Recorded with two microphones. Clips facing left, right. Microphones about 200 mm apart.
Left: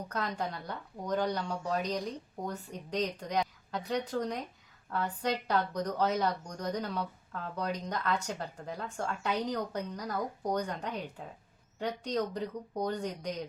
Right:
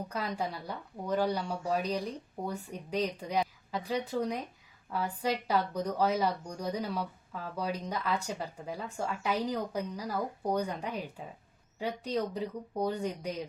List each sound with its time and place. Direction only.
0.1 s speech: 10° right (ahead or behind)